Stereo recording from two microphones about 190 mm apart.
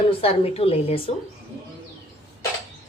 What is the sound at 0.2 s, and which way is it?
Speech, 30° left (ahead or behind).